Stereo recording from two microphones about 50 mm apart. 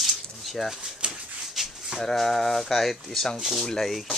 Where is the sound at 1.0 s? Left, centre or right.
Centre.